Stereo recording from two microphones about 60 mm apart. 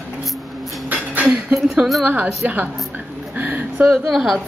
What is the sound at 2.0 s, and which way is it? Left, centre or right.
Speech, right.